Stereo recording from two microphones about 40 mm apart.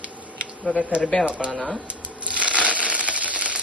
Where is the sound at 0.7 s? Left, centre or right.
Right.